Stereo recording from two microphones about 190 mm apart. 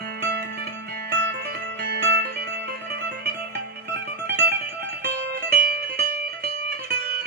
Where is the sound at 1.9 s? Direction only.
55° right (ahead or behind).